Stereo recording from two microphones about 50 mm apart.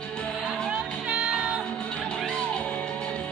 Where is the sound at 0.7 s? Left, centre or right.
Centre.